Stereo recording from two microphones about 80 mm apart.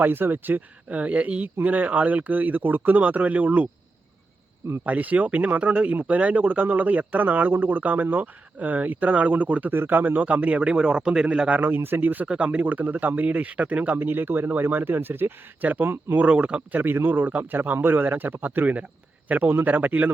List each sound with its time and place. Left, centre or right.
0.0 s speech: right
4.9 s speech: centre